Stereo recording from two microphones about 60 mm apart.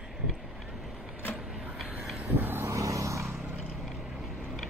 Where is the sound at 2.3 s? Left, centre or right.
Right.